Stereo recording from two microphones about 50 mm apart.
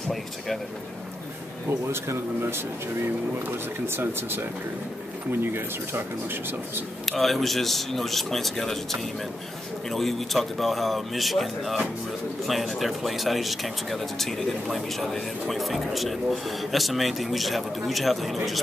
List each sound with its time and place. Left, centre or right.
1.7 s speech: right
3.8 s speech: right
7.1 s speech: centre
9.8 s speech: centre